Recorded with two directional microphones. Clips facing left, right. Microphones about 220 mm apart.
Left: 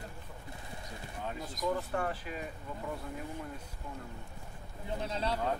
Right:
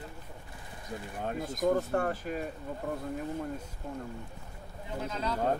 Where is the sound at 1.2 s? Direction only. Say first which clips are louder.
Right 6 dB; 50° right (ahead or behind).